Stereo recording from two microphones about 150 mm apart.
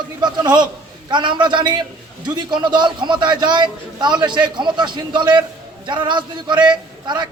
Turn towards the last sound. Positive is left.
turn(degrees=-30)  # may be behind; listen again after turning